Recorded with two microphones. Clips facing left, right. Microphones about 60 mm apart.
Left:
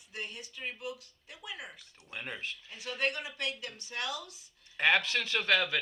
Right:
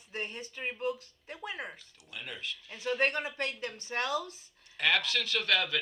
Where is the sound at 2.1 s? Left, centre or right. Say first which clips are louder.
Left 1 dB; left.